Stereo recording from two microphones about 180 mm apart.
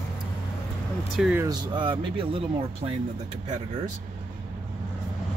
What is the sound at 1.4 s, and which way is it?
Speech, 25° right (ahead or behind).